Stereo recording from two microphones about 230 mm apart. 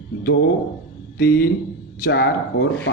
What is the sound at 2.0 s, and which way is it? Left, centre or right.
Speech, left.